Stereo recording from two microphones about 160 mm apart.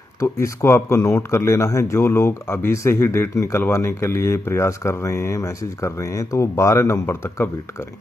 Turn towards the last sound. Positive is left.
turn(degrees=15)  # may be behind; listen again after turning